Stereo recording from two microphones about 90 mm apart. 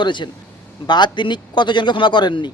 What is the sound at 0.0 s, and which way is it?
Speech, 60° left (ahead or behind).